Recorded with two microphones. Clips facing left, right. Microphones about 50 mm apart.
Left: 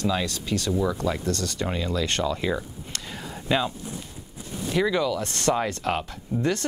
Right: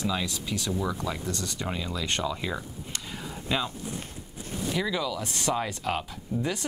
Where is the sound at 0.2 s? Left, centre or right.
Centre.